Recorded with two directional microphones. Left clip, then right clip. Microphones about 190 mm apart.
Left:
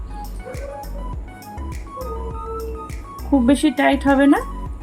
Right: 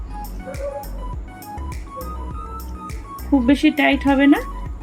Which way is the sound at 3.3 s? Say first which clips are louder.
Even; 5° left (ahead or behind).